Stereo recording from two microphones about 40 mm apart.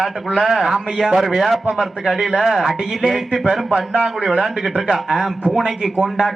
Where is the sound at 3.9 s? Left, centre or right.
Right.